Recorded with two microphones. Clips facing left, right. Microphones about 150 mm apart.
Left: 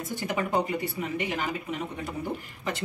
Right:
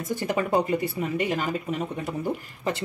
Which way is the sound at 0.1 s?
40° right (ahead or behind).